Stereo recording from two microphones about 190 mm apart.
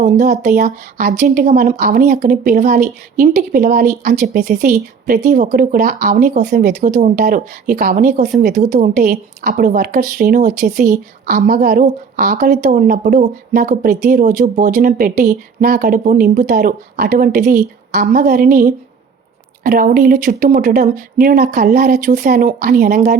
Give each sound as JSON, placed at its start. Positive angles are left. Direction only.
{"t": 0.0, "sound": "speech", "side_deg": -45}
{"t": 12.6, "sound": "speech", "side_deg": -40}